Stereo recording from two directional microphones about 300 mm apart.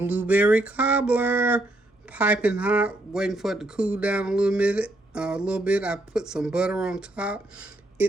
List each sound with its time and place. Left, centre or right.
0.0 s speech: centre